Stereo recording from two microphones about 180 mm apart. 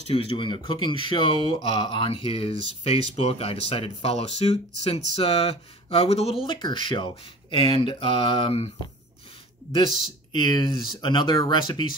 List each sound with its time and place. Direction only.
0.1 s speech: 35° left (ahead or behind)
10.3 s speech: 25° left (ahead or behind)